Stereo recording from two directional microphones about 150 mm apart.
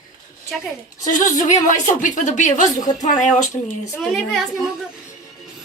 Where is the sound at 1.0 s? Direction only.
55° left (ahead or behind).